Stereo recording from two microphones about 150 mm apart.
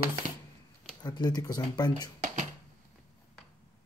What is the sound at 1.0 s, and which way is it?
Speech, 30° left (ahead or behind).